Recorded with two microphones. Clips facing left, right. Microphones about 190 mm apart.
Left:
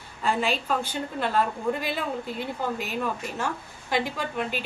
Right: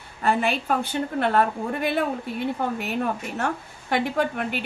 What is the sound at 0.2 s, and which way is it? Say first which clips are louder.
A woman's voice: right 3 dB; 55° right (ahead or behind).